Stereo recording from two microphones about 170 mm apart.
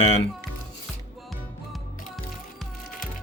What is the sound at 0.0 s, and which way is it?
Speech, 40° left (ahead or behind).